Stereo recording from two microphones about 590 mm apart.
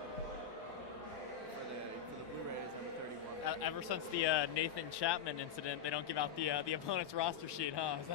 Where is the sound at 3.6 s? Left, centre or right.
Left.